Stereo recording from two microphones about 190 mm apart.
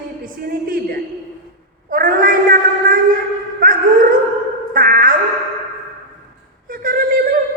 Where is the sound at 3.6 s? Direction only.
45° right (ahead or behind).